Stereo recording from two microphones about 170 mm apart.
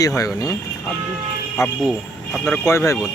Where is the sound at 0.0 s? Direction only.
20° left (ahead or behind).